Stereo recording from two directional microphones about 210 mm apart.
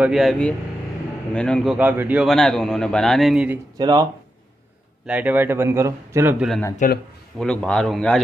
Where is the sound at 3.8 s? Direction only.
20° right (ahead or behind).